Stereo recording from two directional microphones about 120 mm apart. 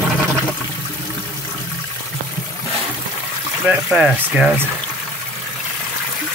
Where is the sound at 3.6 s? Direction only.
5° right (ahead or behind).